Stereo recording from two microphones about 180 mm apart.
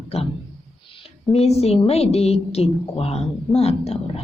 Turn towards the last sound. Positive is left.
turn(degrees=35)  # may be behind; listen again after turning